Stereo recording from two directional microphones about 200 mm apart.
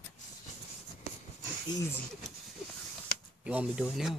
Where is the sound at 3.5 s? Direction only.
5° right (ahead or behind).